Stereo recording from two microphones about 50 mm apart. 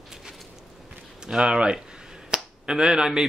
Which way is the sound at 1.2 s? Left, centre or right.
Centre.